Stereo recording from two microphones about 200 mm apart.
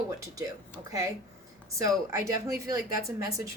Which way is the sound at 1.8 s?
15° right (ahead or behind).